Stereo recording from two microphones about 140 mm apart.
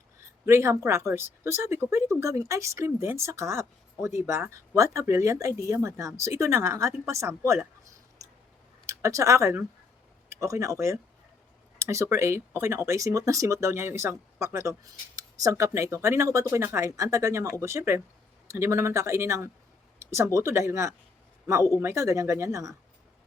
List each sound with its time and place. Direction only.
0.4 s speech: 20° right (ahead or behind)
8.9 s a man's voice: 20° right (ahead or behind)